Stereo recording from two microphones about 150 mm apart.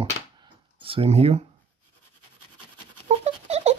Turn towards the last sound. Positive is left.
turn(degrees=-45)  # may be behind; listen again after turning